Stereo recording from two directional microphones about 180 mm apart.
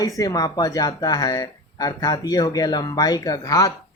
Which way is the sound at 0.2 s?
20° left (ahead or behind).